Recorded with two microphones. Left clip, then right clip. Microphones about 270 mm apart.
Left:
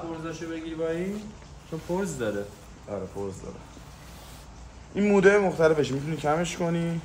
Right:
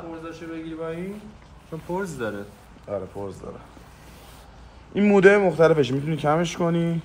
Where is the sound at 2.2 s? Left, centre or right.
Centre.